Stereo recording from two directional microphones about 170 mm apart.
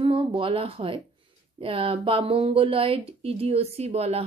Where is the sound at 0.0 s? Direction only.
30° right (ahead or behind).